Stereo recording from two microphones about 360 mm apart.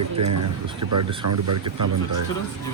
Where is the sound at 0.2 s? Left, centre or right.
Right.